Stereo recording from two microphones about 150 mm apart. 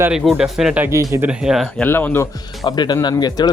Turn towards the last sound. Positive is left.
turn(degrees=30)  # may be behind; listen again after turning